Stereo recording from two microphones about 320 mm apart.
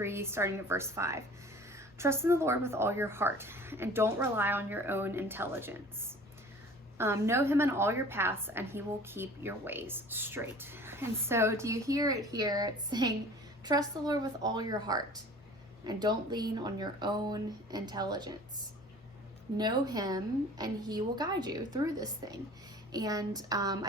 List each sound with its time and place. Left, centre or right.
0.0 s a woman's voice: centre
19.5 s a woman's voice: centre